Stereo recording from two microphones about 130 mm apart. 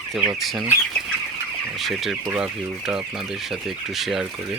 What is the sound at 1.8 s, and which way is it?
Speech, centre (ahead or behind).